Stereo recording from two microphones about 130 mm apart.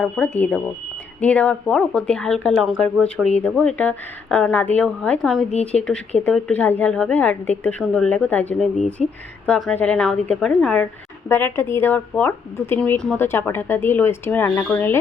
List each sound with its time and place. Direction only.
0.0 s a woman's voice: 10° left (ahead or behind)
5.5 s a woman's voice: 55° left (ahead or behind)
6.2 s a woman's voice: 10° left (ahead or behind)
11.3 s a woman's voice: 15° left (ahead or behind)